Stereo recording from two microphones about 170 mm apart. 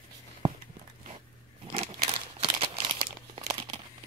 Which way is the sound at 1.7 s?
35° right (ahead or behind).